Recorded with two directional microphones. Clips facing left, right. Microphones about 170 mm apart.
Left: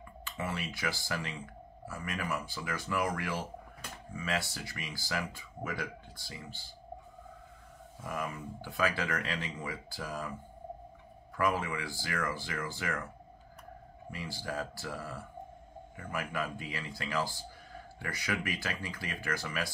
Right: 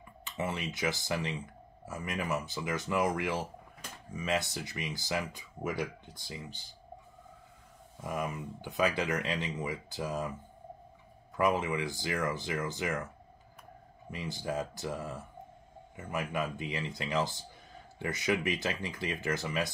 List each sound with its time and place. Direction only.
0.2 s speech: 20° right (ahead or behind)
8.0 s speech: 20° right (ahead or behind)
11.3 s speech: 20° right (ahead or behind)
14.1 s speech: 20° right (ahead or behind)